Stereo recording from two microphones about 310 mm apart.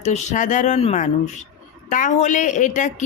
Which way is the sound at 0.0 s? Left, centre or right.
Left.